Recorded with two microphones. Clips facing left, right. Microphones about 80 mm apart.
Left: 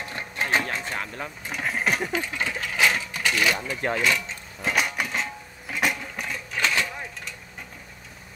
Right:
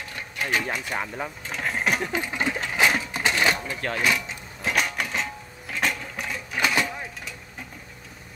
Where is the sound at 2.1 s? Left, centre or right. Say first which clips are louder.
Right 1 dB; centre.